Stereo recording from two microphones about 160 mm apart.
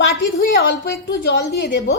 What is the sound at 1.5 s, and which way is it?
Speech, 90° left.